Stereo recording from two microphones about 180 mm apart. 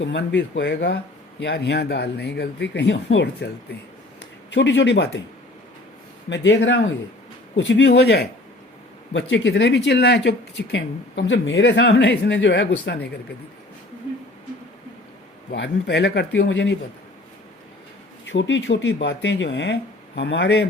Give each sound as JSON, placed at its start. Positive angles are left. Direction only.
{"t": 0.0, "sound": "speech", "side_deg": 75}
{"t": 6.2, "sound": "a man's voice", "side_deg": 90}
{"t": 9.1, "sound": "speech", "side_deg": 80}
{"t": 15.5, "sound": "speech", "side_deg": 70}
{"t": 18.3, "sound": "speech", "side_deg": 90}